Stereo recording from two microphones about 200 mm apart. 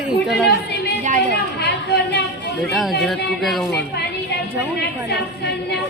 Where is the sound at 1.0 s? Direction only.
35° right (ahead or behind).